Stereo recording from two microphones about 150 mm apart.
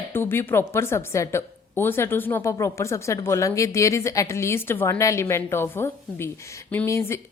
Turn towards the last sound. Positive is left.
turn(degrees=20)  # may be behind; listen again after turning